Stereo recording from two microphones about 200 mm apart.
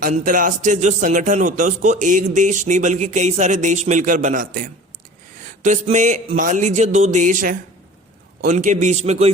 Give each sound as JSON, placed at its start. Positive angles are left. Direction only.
{"t": 0.0, "sound": "speech", "side_deg": -45}